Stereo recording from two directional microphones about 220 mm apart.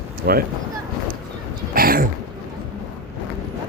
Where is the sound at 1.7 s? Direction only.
40° right (ahead or behind).